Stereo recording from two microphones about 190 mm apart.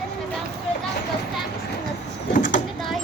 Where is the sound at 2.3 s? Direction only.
45° left (ahead or behind).